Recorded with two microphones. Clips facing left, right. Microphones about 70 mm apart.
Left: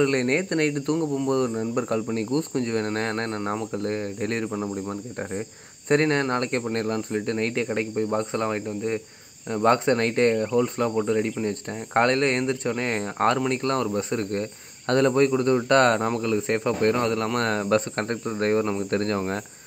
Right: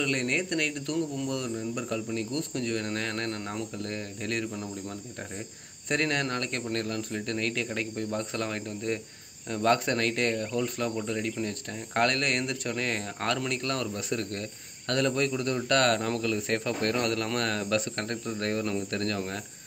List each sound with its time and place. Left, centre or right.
0.0 s speech: left